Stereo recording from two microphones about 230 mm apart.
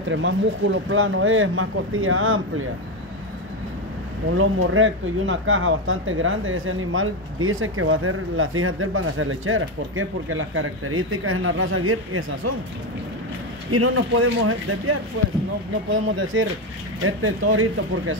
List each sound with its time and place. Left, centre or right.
0.1 s speech: right
4.4 s speech: right
13.7 s speech: right